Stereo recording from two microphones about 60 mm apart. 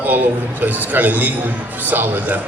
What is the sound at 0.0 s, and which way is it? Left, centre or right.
A man's voice, right.